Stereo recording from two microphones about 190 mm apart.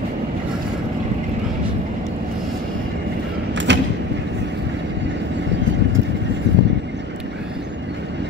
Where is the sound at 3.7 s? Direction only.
70° right (ahead or behind).